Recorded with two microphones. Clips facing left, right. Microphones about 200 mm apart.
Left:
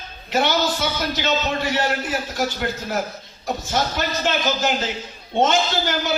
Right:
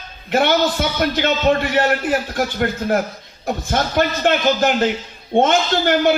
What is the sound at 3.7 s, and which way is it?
A man's voice, 55° right (ahead or behind).